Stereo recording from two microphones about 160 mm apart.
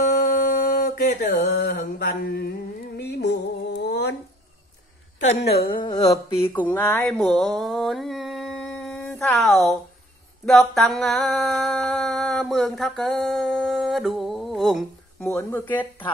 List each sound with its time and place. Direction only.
0.0 s mantra: 50° left (ahead or behind); by 2.5 s 75° left (ahead or behind)
3.0 s a sound: 90° left
5.6 s mantra: 70° left (ahead or behind)
6.5 s speech: 15° left (ahead or behind)
7.1 s mantra: 5° left (ahead or behind)
9.5 s speech: centre (ahead or behind)
10.4 s a sound: centre (ahead or behind)
15.2 s speech: 15° left (ahead or behind)